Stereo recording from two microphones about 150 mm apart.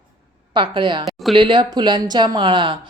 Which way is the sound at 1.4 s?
30° right (ahead or behind).